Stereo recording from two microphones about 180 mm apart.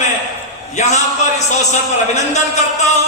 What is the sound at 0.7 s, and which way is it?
Speech, 40° left (ahead or behind).